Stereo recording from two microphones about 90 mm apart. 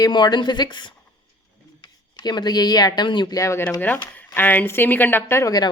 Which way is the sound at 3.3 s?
35° left (ahead or behind).